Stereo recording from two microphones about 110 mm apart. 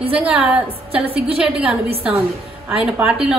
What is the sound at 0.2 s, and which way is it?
A woman's voice, 15° right (ahead or behind).